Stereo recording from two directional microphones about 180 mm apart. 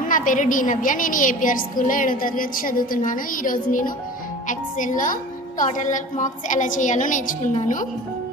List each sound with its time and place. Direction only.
0.1 s a woman's voice: 45° left (ahead or behind)